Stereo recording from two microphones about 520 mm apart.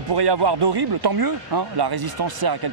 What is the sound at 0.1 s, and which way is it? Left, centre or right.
Speech, right.